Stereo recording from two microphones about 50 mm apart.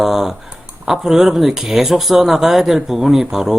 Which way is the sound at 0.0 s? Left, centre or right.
Centre.